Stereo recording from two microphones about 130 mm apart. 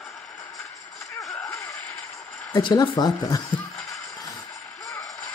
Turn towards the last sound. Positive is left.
turn(degrees=30)  # may be behind; listen again after turning